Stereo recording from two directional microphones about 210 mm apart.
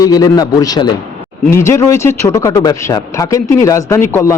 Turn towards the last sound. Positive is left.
turn(degrees=15)  # may be behind; listen again after turning